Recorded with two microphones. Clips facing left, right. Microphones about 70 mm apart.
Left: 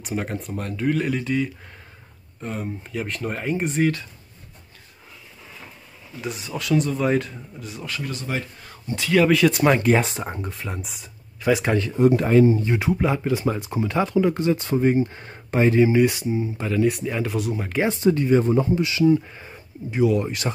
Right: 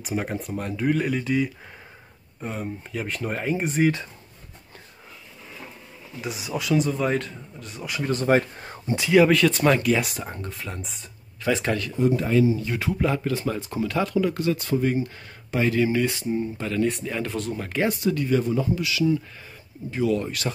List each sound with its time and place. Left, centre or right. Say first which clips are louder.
0.0 s speech: even; centre
6.2 s speech: even; centre
8.0 s speech: right 10 dB; right
8.9 s speech: right 2 dB; centre
9.2 s speech: left 2 dB; centre
9.5 s speech: left 2 dB; centre
9.8 s speech: left 3 dB; left
10.7 s speech: left 2 dB; centre
12.3 s speech: left 4 dB; left
12.5 s speech: left 4 dB; left
17.7 s speech: left 4 dB; left
19.9 s speech: left 3 dB; centre